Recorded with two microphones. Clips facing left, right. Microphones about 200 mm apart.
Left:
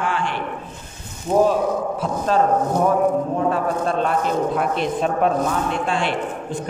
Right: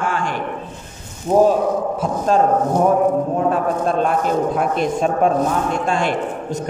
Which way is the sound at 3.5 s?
50° right (ahead or behind).